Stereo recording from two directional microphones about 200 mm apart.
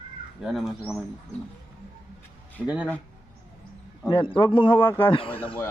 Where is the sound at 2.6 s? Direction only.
5° right (ahead or behind).